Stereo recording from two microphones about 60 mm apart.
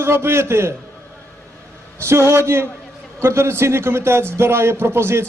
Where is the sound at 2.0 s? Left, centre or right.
Right.